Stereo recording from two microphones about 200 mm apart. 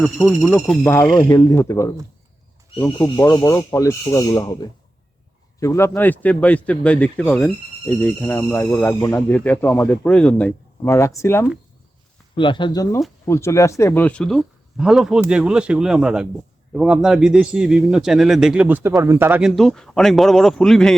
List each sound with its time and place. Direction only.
0.0 s a man's voice: centre (ahead or behind)
0.9 s speech: 15° left (ahead or behind)
12.4 s a man's voice: 25° left (ahead or behind); by 20.9 s 5° left (ahead or behind)